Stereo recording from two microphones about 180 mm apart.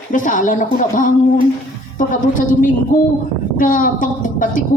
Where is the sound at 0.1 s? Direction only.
45° left (ahead or behind).